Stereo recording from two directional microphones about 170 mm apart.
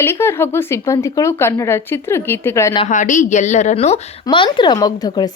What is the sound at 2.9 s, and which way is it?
A woman's voice, 45° left (ahead or behind).